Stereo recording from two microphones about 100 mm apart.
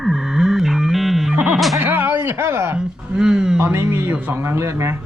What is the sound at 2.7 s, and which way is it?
Speech, 10° right (ahead or behind).